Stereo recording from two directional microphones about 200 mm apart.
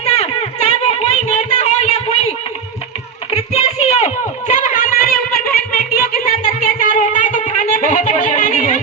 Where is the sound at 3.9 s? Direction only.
35° left (ahead or behind).